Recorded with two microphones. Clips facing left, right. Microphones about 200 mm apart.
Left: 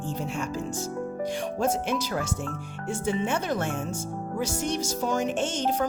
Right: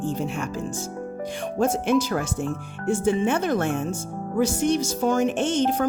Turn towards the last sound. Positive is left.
turn(degrees=-55)  # may be behind; listen again after turning